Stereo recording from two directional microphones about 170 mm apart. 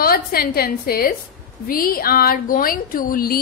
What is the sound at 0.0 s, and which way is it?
A woman's voice, 60° left (ahead or behind).